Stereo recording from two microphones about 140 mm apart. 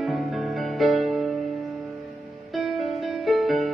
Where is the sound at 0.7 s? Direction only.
Centre (ahead or behind).